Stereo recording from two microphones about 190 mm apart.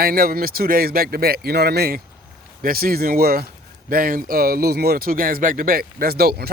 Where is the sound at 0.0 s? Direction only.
50° right (ahead or behind).